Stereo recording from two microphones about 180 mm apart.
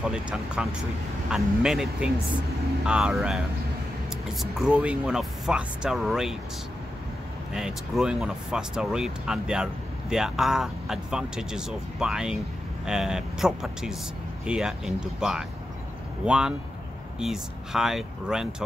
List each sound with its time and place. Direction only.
0.0 s speech: 5° right (ahead or behind)
7.5 s speech: 5° right (ahead or behind)